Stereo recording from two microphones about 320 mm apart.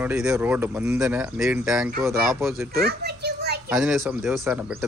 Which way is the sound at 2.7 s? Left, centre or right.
Right.